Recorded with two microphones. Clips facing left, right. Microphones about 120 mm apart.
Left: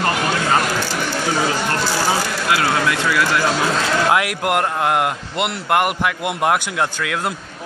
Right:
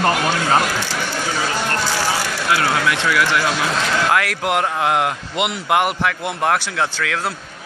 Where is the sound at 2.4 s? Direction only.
25° left (ahead or behind); by 7.4 s 5° left (ahead or behind).